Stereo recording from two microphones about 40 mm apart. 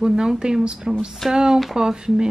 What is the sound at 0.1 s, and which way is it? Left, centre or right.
Speech, centre.